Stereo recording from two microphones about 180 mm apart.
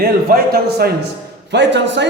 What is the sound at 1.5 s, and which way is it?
Speech, 75° right (ahead or behind).